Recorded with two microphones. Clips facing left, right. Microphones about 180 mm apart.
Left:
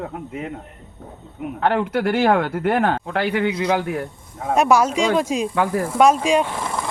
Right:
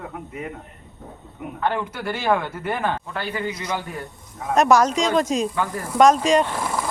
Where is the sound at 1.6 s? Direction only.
70° left (ahead or behind).